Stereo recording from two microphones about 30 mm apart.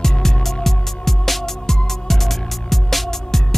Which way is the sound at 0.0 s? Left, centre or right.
Centre.